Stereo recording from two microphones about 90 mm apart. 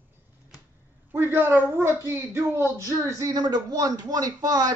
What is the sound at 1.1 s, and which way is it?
A woman's voice, 25° right (ahead or behind).